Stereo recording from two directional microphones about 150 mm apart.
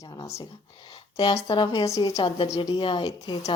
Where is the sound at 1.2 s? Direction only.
35° left (ahead or behind).